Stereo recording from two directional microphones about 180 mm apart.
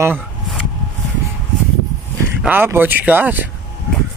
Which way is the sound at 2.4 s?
10° right (ahead or behind).